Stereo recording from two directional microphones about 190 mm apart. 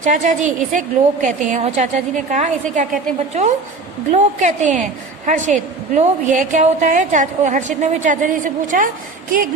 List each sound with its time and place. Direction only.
0.0 s a woman's voice: 40° right (ahead or behind)